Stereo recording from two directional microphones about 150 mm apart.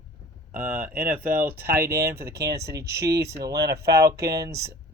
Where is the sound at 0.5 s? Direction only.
15° right (ahead or behind).